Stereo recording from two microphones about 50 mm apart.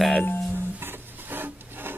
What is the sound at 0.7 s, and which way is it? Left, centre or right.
Rub, right.